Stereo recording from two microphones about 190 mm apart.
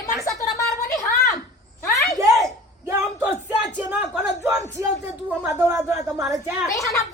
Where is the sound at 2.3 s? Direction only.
Centre (ahead or behind).